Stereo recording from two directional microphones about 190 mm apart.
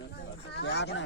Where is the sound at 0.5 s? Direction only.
60° left (ahead or behind).